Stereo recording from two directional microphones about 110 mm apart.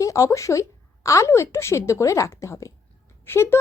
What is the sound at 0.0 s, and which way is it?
Speech, 30° left (ahead or behind).